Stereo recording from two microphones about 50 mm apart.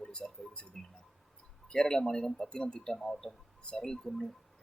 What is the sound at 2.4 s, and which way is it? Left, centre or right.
Speech, centre.